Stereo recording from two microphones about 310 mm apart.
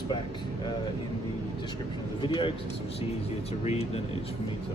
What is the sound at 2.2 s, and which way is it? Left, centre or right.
Speech, centre.